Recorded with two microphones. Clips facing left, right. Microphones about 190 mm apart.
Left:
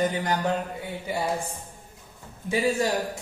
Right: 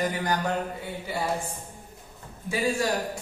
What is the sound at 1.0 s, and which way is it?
Speech, 15° left (ahead or behind).